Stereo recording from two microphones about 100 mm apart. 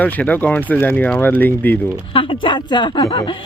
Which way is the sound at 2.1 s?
60° left (ahead or behind).